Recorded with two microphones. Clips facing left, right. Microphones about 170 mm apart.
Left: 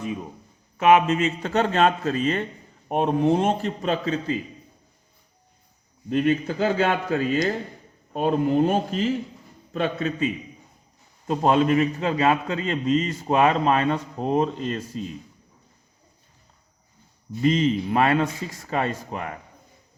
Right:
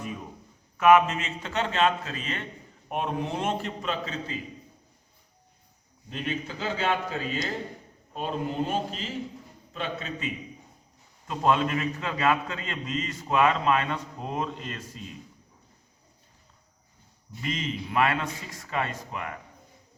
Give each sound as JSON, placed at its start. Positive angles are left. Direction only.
{"t": 0.8, "sound": "a man's voice", "side_deg": 30}
{"t": 6.1, "sound": "a man's voice", "side_deg": 50}
{"t": 11.3, "sound": "a man's voice", "side_deg": 35}
{"t": 17.4, "sound": "a man's voice", "side_deg": 35}